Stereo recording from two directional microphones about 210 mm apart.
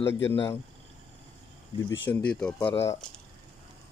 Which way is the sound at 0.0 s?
10° left (ahead or behind).